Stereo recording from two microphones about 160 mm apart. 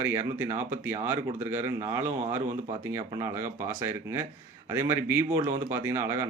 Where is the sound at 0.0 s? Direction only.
15° right (ahead or behind).